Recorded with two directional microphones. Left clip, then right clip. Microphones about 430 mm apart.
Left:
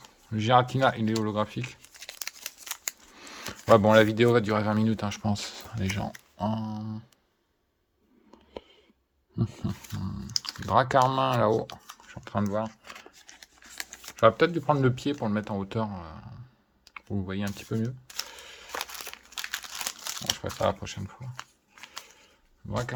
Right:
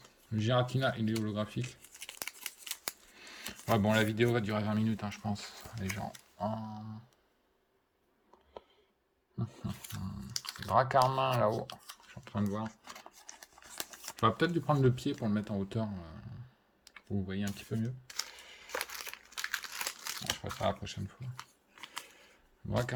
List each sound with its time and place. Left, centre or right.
0.3 s tearing: centre
3.2 s speech: centre
9.4 s typing: left
11.1 s a sound: centre
13.9 s speech: centre
17.2 s a sound: centre
20.8 s shuffling cards: centre
22.7 s speech: centre